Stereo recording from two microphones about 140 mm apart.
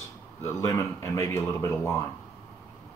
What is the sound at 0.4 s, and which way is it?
Speech, 20° left (ahead or behind).